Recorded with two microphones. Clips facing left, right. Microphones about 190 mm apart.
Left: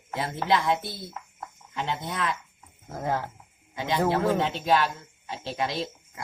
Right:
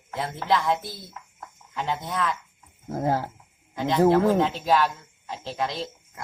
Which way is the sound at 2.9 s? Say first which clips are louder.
Right 4 dB; 35° right (ahead or behind).